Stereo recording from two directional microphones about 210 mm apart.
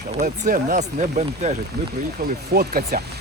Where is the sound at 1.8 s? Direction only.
50° right (ahead or behind).